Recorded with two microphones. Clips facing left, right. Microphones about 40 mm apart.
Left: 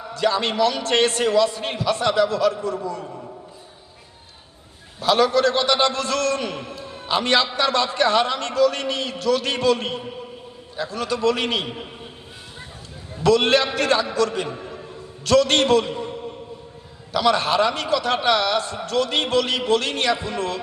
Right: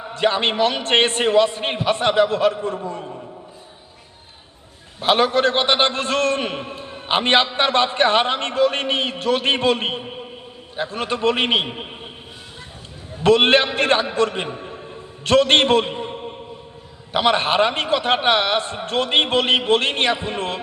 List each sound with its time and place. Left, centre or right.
0.0 s a man's voice: right
4.9 s a man's voice: right
13.2 s a man's voice: right